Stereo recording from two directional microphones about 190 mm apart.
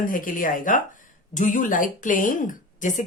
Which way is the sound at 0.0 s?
45° left (ahead or behind).